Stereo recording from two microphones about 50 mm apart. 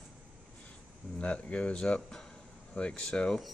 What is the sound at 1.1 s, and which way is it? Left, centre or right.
Speech, left.